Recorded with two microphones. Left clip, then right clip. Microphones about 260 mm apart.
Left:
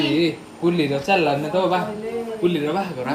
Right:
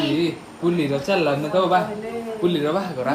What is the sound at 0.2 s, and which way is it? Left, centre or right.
A man's voice, centre.